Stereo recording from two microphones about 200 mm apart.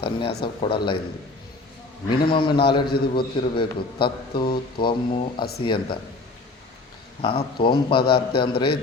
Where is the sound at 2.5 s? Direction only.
50° left (ahead or behind).